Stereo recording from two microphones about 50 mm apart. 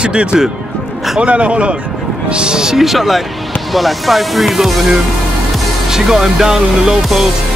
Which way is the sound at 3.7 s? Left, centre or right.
Centre.